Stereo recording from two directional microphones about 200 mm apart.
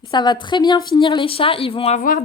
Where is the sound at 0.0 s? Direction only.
20° left (ahead or behind).